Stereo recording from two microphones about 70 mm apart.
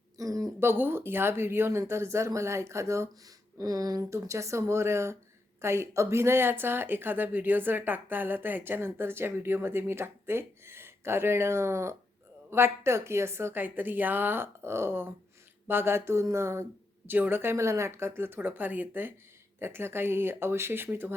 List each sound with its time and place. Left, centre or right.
0.2 s a sound: right
0.6 s speech: right
3.6 s speech: right
4.1 s speech: right
17.1 s speech: right